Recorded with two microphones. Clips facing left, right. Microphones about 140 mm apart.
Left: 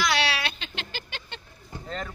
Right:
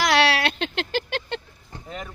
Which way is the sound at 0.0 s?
90° right.